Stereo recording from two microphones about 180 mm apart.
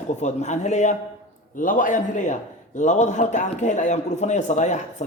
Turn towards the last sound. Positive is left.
turn(degrees=40)  # may be behind; listen again after turning